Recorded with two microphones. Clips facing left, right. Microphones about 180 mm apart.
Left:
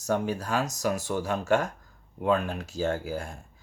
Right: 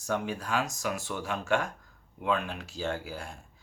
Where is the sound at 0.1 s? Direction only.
40° left (ahead or behind).